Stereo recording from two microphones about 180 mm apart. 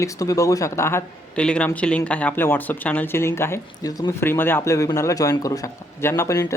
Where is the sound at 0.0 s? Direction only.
20° left (ahead or behind).